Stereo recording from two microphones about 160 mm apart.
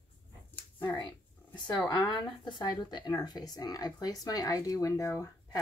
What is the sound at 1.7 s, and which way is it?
Speech, 25° left (ahead or behind).